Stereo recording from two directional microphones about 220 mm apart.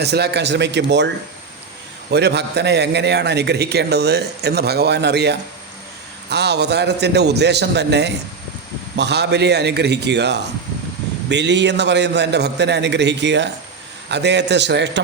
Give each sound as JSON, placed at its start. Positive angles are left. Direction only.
{"t": 0.0, "sound": "a man's voice", "side_deg": -50}